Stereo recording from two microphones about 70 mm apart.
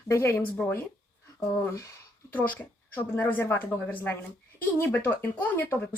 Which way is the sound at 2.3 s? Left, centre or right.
Left.